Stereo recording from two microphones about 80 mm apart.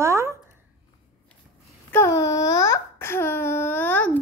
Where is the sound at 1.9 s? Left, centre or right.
Left.